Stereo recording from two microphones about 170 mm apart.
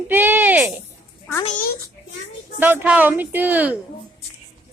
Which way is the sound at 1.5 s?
55° left (ahead or behind).